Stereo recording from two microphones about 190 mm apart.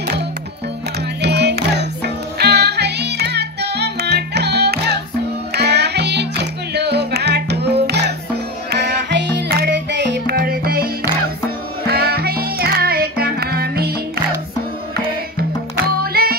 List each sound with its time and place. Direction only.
1.2 s music: 60° right (ahead or behind)
11.9 s music: 55° right (ahead or behind)
16.0 s music: 50° right (ahead or behind)